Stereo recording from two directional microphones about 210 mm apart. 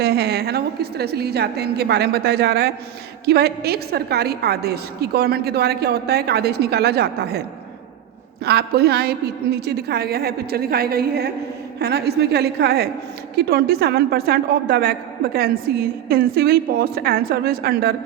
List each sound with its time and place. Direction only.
0.0 s a woman's voice: 50° right (ahead or behind)
8.4 s a woman's voice: 50° right (ahead or behind)